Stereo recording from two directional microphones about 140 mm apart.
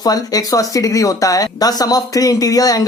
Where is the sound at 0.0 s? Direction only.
25° left (ahead or behind).